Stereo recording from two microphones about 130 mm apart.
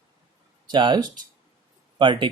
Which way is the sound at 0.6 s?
35° right (ahead or behind).